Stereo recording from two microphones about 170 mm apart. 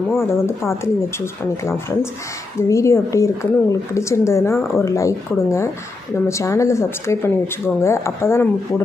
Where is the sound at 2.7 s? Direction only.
15° left (ahead or behind).